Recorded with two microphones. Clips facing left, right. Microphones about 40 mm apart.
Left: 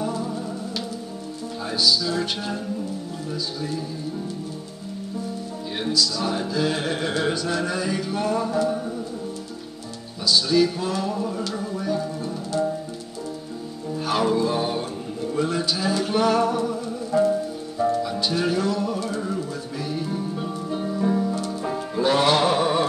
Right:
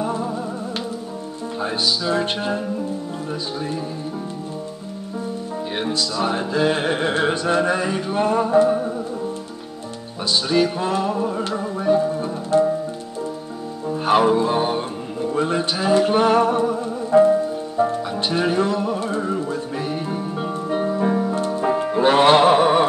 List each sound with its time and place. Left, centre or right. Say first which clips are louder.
0.0 s music: right 3 dB; right
1.6 s music: even; right
5.8 s music: right 1 dB; right
10.2 s music: right 1 dB; right
13.9 s music: right 6 dB; right